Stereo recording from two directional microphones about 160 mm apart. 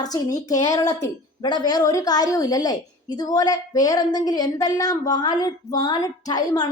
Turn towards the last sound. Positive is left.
turn(degrees=25)  # may be behind; listen again after turning